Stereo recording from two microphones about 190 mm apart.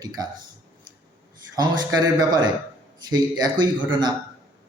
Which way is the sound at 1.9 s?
20° right (ahead or behind).